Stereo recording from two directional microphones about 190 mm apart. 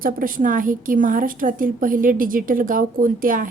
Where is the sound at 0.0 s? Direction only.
45° right (ahead or behind).